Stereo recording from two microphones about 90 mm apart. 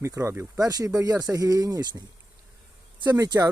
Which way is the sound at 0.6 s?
45° right (ahead or behind).